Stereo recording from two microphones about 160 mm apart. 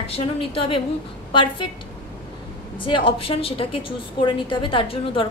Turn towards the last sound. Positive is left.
turn(degrees=35)  # may be behind; listen again after turning